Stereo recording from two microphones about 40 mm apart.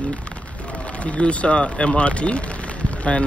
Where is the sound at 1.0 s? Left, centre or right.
Left.